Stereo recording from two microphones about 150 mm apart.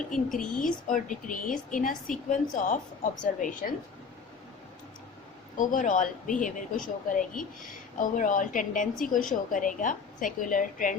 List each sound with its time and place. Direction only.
0.1 s speech: 5° left (ahead or behind)
0.6 s speech: 60° left (ahead or behind)
5.5 s speech: 60° left (ahead or behind)